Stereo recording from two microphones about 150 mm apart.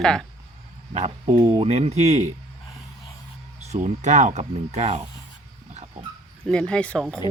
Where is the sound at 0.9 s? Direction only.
45° right (ahead or behind).